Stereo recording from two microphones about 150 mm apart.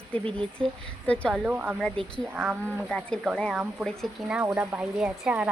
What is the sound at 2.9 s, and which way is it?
Speech, 5° left (ahead or behind).